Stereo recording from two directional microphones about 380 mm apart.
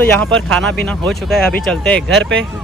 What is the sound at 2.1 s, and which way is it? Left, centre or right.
Speech, right.